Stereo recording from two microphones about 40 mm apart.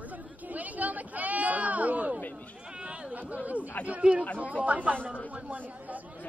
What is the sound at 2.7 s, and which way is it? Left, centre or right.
Chatter, right.